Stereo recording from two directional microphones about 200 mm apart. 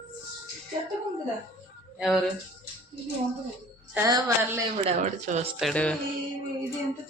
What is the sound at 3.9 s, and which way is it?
Speech, 15° right (ahead or behind).